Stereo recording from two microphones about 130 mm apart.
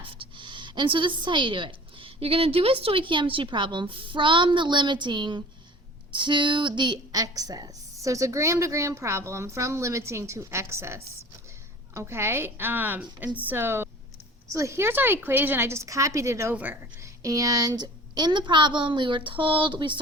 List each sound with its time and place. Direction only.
0.0 s a woman's voice: 40° right (ahead or behind); by 17.1 s 15° right (ahead or behind)
17.2 s a woman's voice: 25° right (ahead or behind)